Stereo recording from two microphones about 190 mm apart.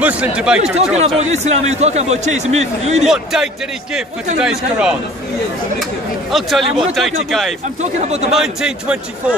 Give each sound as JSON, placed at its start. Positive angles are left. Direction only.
{"t": 0.0, "sound": "speech", "side_deg": -5}
{"t": 0.9, "sound": "speech", "side_deg": -35}
{"t": 3.1, "sound": "speech", "side_deg": 0}
{"t": 6.3, "sound": "speech", "side_deg": 0}
{"t": 7.8, "sound": "speech", "side_deg": -35}
{"t": 8.3, "sound": "speech", "side_deg": 0}